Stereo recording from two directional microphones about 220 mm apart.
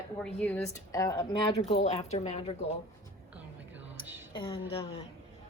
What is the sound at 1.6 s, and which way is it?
Speech, 30° left (ahead or behind).